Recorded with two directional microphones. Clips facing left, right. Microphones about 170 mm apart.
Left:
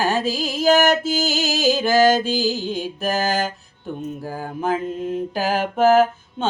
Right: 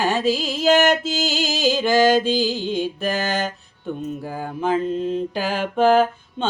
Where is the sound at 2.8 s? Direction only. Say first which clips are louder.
Left 1 dB; 40° left (ahead or behind).